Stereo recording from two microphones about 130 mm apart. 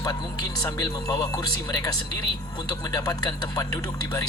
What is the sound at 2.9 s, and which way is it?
Speech, 30° left (ahead or behind).